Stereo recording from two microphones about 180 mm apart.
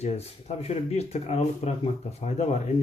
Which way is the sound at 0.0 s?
35° left (ahead or behind).